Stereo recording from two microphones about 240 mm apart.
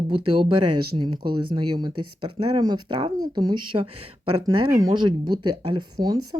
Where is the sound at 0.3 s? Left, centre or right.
Right.